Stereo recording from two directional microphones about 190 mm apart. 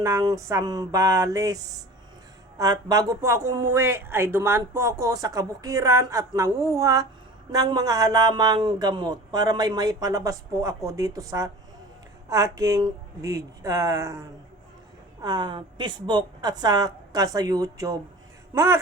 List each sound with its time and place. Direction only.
0.0 s a man's voice: 15° right (ahead or behind)